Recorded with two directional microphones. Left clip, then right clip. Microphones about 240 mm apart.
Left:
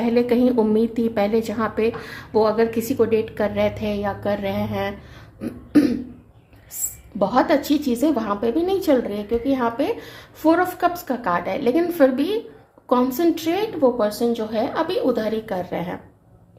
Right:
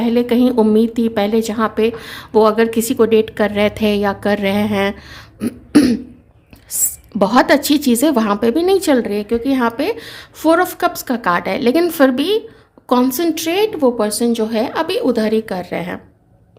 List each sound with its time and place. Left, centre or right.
0.0 s a woman's voice: right
7.2 s a woman's voice: right